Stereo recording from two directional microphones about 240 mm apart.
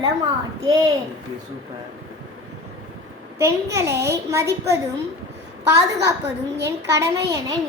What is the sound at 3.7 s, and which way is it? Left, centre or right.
Child singing, centre.